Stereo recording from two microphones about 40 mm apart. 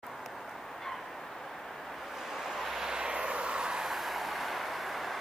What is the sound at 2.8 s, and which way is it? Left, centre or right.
Vehicle, centre.